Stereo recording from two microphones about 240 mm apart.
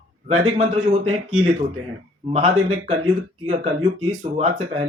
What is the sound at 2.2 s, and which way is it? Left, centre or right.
Speech, right.